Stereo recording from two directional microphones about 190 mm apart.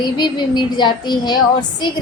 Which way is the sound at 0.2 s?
25° left (ahead or behind).